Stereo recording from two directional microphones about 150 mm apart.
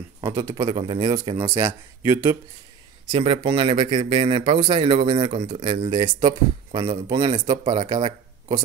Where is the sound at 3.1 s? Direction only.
40° right (ahead or behind).